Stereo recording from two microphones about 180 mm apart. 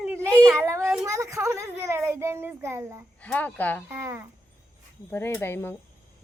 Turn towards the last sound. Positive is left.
turn(degrees=15)  # may be behind; listen again after turning